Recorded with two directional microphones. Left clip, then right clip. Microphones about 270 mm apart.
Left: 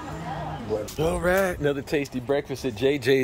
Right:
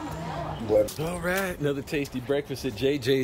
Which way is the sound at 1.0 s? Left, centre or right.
Left.